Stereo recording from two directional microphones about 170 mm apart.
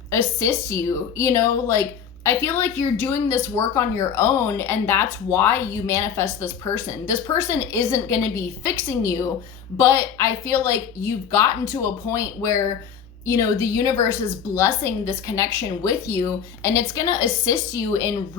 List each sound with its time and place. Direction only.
0.1 s speech: 15° left (ahead or behind)